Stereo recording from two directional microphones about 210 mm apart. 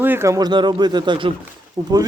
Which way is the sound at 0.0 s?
10° right (ahead or behind).